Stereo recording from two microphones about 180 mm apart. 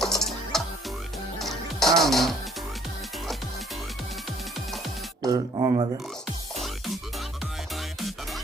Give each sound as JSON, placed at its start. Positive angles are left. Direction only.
{"t": 0.0, "sound": "music", "side_deg": 0}
{"t": 5.2, "sound": "speech", "side_deg": -20}